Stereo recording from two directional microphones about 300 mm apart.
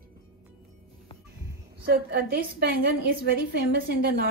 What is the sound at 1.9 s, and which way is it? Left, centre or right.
Speech, right.